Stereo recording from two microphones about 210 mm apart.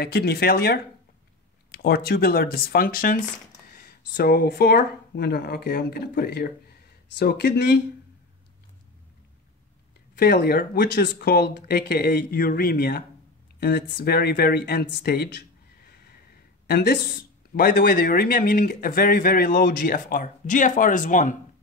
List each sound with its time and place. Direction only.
0.0 s speech: 50° left (ahead or behind)
10.1 s speech: 50° left (ahead or behind)